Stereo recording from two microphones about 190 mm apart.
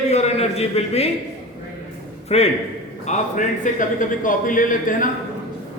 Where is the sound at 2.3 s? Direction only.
35° left (ahead or behind).